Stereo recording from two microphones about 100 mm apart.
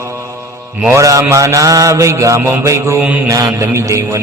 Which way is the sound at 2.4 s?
25° right (ahead or behind).